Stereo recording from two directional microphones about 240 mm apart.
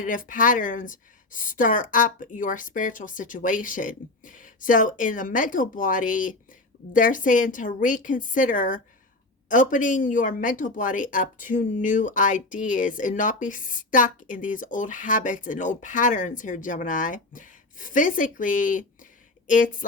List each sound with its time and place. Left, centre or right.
0.0 s speech: left